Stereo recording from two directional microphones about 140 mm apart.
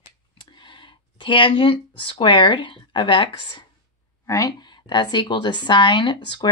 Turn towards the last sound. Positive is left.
turn(degrees=35)  # may be behind; listen again after turning